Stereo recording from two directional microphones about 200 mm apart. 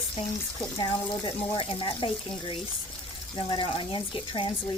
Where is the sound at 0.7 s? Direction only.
25° left (ahead or behind).